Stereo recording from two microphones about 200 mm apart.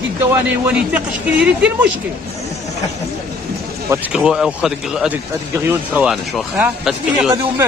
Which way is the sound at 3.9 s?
5° right (ahead or behind).